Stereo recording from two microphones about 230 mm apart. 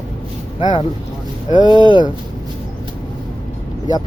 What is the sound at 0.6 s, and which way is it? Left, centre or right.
Speech, centre.